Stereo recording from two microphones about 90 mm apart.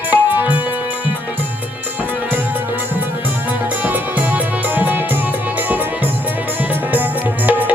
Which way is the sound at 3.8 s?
20° right (ahead or behind).